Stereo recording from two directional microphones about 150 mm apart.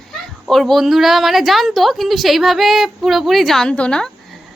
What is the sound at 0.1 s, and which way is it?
A woman's voice, centre (ahead or behind).